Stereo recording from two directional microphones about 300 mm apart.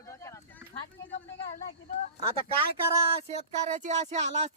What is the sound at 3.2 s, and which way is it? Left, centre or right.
Speech, right.